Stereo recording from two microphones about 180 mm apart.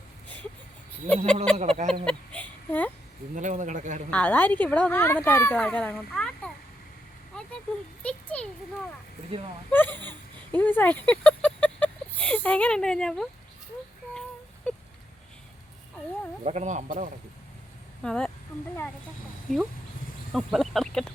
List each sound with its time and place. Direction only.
1.1 s speech: 10° left (ahead or behind)
1.5 s speech: 35° right (ahead or behind)
2.0 s a sound: 5° left (ahead or behind)
3.3 s speech: 45° right (ahead or behind)
4.1 s a child's voice: 10° left (ahead or behind)
9.7 s a sound: 10° left (ahead or behind)
16.4 s speech: 40° right (ahead or behind)
18.0 s speech: 5° left (ahead or behind)
19.5 s speech: centre (ahead or behind)